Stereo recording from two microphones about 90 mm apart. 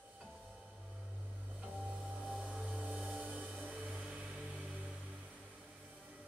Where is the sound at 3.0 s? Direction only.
15° right (ahead or behind).